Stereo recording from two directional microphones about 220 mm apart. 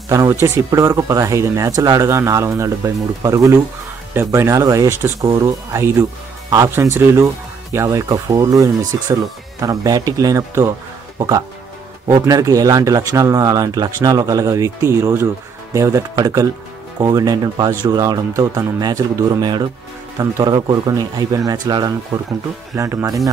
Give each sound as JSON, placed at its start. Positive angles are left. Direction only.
{"t": 0.1, "sound": "speech", "side_deg": -15}